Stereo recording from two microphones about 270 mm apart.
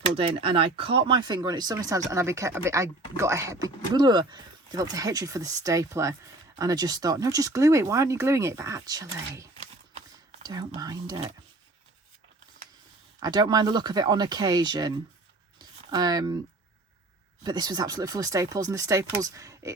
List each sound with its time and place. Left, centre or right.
0.2 s speech: centre
9.6 s a sound: right
13.1 s speech: centre
17.4 s speech: centre